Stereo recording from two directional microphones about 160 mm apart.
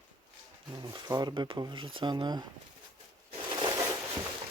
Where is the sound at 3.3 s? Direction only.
30° right (ahead or behind).